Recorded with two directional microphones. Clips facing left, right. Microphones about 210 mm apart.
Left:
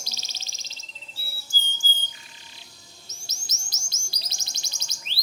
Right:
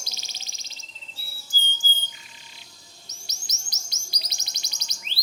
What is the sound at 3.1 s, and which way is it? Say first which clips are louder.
Chirp: left 1 dB; 15° right (ahead or behind).